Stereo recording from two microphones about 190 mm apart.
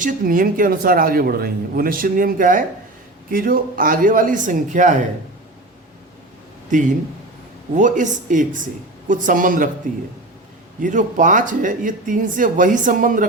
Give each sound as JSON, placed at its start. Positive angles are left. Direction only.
{"t": 0.0, "sound": "speech", "side_deg": -45}
{"t": 6.7, "sound": "speech", "side_deg": -40}